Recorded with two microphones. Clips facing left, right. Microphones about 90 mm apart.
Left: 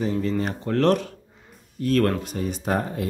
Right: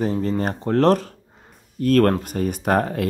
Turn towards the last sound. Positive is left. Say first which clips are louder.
# right 5 dB
turn(degrees=-65)  # may be behind; listen again after turning